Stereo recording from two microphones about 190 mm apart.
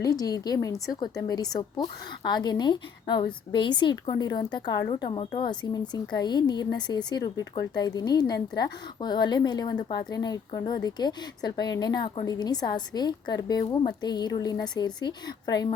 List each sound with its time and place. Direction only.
0.0 s a woman's voice: 20° left (ahead or behind)